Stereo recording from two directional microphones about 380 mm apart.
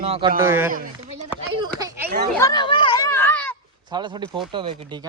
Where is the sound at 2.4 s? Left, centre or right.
Centre.